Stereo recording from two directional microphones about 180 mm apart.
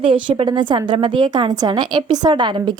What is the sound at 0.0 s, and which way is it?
A woman's voice, 30° right (ahead or behind).